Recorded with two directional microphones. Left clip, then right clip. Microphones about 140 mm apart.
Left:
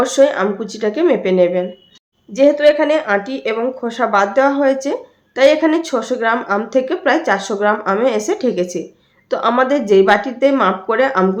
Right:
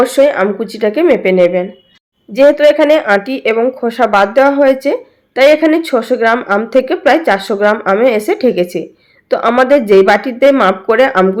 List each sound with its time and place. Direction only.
0.0 s speech: 30° right (ahead or behind)